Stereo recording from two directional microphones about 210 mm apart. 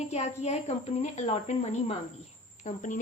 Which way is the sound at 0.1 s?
30° left (ahead or behind).